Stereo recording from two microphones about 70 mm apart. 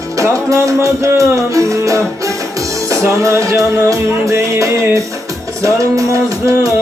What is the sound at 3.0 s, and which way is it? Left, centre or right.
Music, right.